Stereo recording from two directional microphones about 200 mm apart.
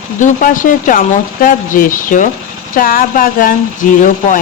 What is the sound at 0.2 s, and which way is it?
Speech, 40° left (ahead or behind).